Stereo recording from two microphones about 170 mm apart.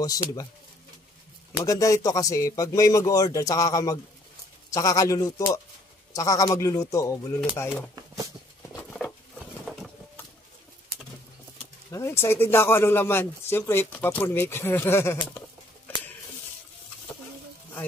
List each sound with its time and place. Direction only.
1.6 s speech: 20° left (ahead or behind)
8.7 s patter: centre (ahead or behind)
9.7 s a sound: centre (ahead or behind)
11.9 s speech: 15° left (ahead or behind)